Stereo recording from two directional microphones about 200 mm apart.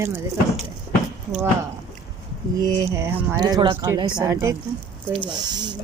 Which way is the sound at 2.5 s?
15° right (ahead or behind).